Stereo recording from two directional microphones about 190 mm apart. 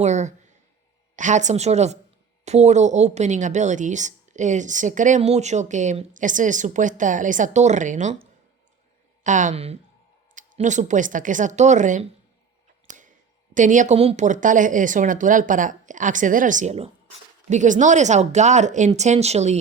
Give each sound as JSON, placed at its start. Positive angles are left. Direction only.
{"t": 0.0, "sound": "a woman's voice", "side_deg": -40}